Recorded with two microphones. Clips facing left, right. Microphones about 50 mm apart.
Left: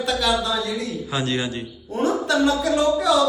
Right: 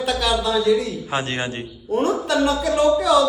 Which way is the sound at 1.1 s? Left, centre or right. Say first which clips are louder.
Even; right.